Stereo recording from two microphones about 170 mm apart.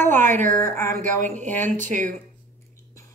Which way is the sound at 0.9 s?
45° right (ahead or behind).